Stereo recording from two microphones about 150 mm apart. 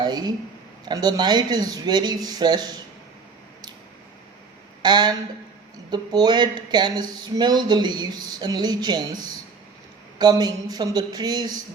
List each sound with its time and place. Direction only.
0.0 s speech: 25° right (ahead or behind)
4.8 s speech: 30° right (ahead or behind)
10.2 s speech: 25° right (ahead or behind)